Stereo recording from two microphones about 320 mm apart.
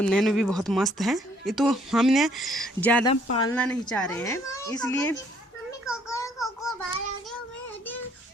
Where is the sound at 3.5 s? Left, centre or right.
Centre.